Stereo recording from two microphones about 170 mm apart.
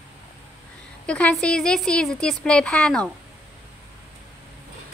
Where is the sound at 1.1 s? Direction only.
5° left (ahead or behind).